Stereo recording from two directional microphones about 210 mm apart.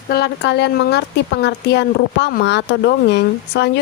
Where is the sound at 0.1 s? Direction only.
50° left (ahead or behind).